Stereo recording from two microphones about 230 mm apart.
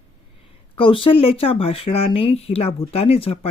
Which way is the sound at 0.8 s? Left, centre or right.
Left.